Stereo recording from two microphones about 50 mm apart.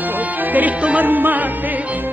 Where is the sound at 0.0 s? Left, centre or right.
Right.